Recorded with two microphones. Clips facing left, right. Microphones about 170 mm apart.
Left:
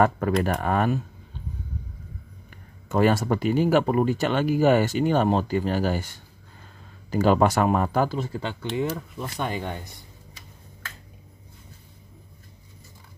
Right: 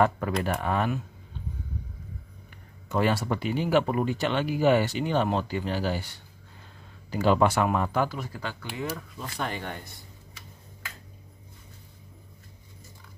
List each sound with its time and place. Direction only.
0.4 s speech: 45° left (ahead or behind)
2.9 s speech: 45° left (ahead or behind); by 9.9 s 15° left (ahead or behind)